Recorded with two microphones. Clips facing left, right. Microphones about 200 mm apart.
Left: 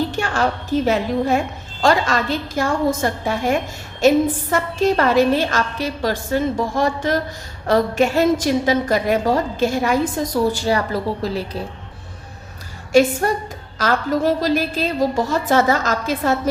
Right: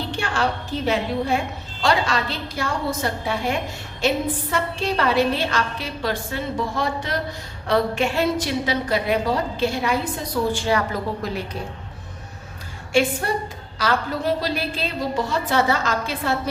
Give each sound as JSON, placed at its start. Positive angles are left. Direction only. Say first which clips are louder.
{"t": 0.1, "sound": "a woman's voice", "louder": "left 3 dB", "side_deg": 45}
{"t": 10.5, "sound": "a woman's voice", "louder": "left 2 dB", "side_deg": 35}
{"t": 12.9, "sound": "a woman's voice", "louder": "left 5 dB", "side_deg": 45}